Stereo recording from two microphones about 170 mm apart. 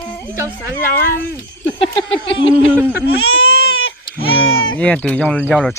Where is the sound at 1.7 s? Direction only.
30° left (ahead or behind).